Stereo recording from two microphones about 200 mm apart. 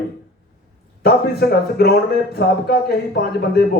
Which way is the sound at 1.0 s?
50° left (ahead or behind).